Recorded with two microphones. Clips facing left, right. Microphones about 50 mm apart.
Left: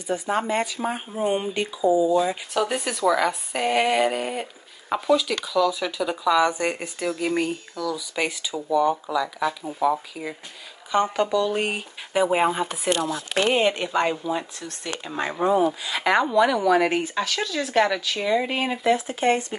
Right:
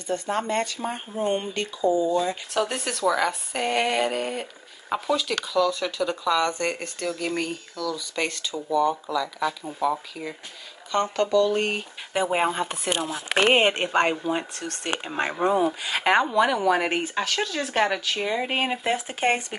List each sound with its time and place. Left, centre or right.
0.0 s speech: centre
12.9 s speech: centre
13.4 s speech: right
14.6 s speech: right
16.2 s speech: centre